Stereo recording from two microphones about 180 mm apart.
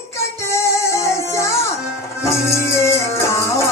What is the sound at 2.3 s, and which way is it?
Music, 15° left (ahead or behind).